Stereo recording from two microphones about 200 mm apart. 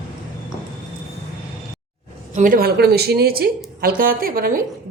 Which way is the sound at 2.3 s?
40° right (ahead or behind).